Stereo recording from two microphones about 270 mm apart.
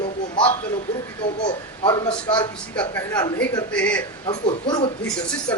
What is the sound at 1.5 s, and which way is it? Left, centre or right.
A man's voice, centre.